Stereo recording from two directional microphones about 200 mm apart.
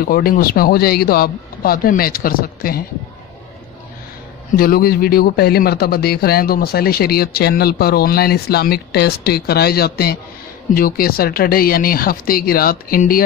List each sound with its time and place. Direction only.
0.0 s speech: 45° left (ahead or behind)
4.6 s speech: 50° left (ahead or behind)